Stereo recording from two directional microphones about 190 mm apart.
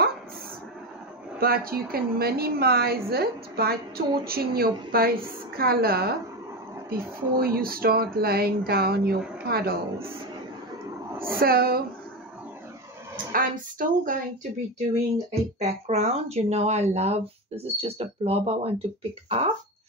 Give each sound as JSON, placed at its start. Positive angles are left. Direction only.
{"t": 1.4, "sound": "speech", "side_deg": -50}
{"t": 11.3, "sound": "speech", "side_deg": -50}
{"t": 13.3, "sound": "speech", "side_deg": -45}
{"t": 15.6, "sound": "speech", "side_deg": -35}